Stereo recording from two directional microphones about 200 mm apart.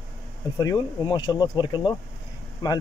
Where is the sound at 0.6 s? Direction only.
20° left (ahead or behind).